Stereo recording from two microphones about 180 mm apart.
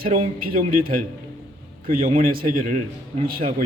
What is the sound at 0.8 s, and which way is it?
A man's voice, 50° right (ahead or behind).